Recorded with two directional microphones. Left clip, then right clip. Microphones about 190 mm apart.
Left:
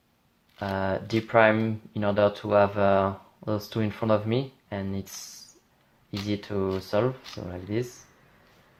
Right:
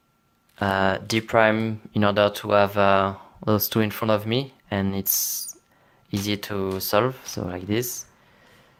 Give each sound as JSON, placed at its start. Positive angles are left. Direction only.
{"t": 0.6, "sound": "speech", "side_deg": -40}